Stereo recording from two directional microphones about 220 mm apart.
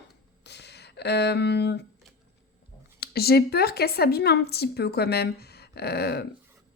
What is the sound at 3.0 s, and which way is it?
A woman's voice, 45° left (ahead or behind).